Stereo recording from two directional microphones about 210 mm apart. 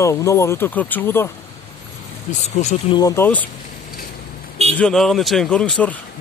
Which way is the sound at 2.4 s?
30° left (ahead or behind).